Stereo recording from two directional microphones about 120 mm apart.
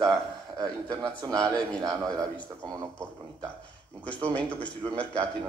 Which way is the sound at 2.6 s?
35° right (ahead or behind).